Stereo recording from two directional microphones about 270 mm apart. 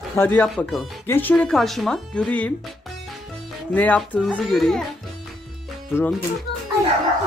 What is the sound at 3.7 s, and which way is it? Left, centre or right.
Speech, centre.